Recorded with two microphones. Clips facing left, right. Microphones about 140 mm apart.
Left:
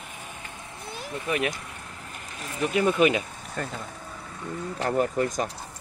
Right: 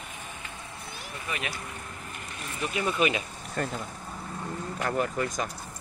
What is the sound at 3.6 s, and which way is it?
Speech, centre (ahead or behind).